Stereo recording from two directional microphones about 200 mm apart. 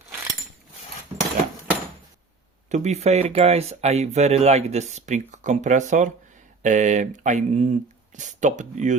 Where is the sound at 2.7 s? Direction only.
35° right (ahead or behind).